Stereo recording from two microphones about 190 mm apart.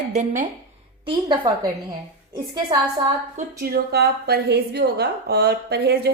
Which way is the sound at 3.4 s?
50° right (ahead or behind).